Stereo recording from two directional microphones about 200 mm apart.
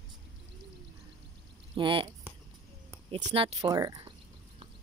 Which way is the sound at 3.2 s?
25° right (ahead or behind).